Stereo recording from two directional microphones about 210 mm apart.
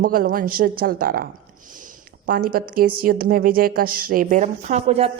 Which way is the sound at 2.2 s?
45° right (ahead or behind).